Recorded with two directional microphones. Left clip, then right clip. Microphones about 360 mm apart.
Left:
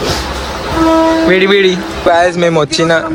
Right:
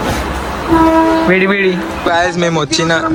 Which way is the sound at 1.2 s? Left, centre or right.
Centre.